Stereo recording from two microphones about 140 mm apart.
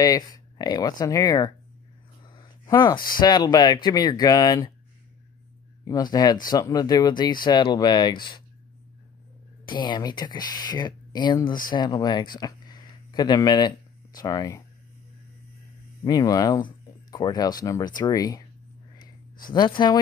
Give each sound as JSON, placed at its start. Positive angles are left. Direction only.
{"t": 0.0, "sound": "speech", "side_deg": 25}
{"t": 2.6, "sound": "speech", "side_deg": 30}
{"t": 5.9, "sound": "speech", "side_deg": 25}
{"t": 9.7, "sound": "speech", "side_deg": 35}
{"t": 16.0, "sound": "speech", "side_deg": 25}
{"t": 19.5, "sound": "speech", "side_deg": 30}